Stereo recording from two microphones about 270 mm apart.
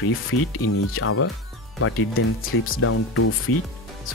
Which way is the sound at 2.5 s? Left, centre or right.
Left.